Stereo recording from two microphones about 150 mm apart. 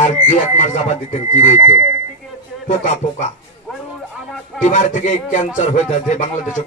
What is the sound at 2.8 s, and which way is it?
Speech, 55° left (ahead or behind).